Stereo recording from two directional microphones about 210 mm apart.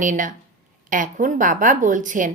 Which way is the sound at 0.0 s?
40° right (ahead or behind).